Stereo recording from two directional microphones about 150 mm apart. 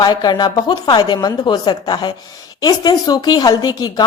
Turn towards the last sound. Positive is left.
turn(degrees=25)  # may be behind; listen again after turning